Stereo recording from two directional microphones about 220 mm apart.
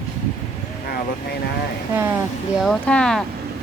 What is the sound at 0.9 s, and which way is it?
Speech, 45° left (ahead or behind).